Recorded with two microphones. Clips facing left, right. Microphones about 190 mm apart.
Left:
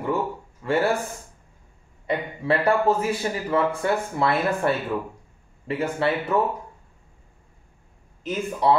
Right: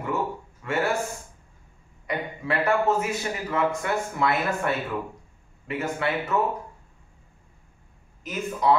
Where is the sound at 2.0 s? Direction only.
30° left (ahead or behind).